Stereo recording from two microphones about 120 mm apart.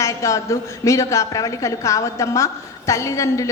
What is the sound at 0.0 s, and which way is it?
A woman's voice, 25° left (ahead or behind).